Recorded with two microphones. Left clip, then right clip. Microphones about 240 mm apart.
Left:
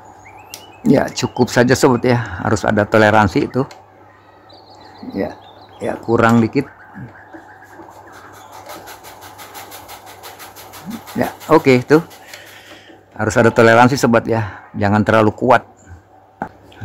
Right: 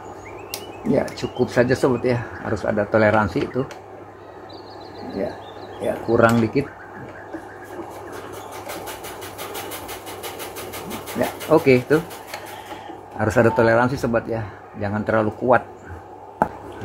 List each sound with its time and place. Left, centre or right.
0.9 s speech: left
5.8 s speech: left
11.1 s speech: left
13.2 s speech: left